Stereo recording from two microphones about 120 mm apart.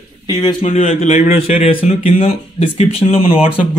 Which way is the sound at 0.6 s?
55° left (ahead or behind).